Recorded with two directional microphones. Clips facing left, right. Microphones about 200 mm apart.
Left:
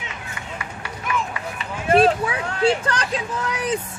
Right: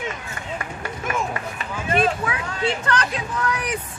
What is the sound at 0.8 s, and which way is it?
Run, 45° right (ahead or behind).